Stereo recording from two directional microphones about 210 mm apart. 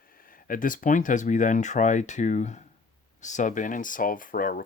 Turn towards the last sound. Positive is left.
turn(degrees=40)  # may be behind; listen again after turning